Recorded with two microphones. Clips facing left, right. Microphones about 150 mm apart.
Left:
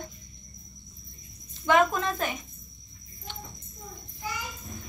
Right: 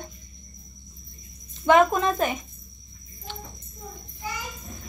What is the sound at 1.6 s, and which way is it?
Speech, 20° right (ahead or behind).